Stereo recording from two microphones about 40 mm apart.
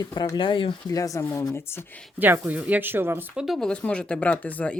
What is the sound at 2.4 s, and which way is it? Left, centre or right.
Speech, right.